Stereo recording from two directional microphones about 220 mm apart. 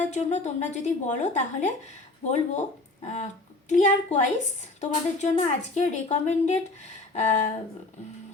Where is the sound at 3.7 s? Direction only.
35° left (ahead or behind).